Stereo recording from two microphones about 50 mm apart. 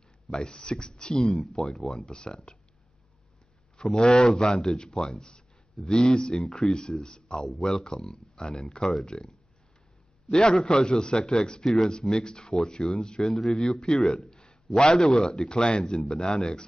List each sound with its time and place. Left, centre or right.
0.3 s a man's voice: centre
1.2 s a man's voice: centre
3.7 s a man's voice: centre
10.3 s a man's voice: centre
13.3 s a man's voice: centre